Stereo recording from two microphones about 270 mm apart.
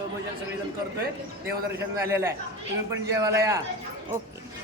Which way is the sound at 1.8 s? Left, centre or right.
Centre.